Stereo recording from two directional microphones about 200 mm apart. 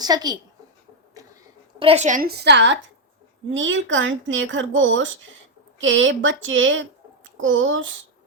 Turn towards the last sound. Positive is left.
turn(degrees=-70)  # may be behind; listen again after turning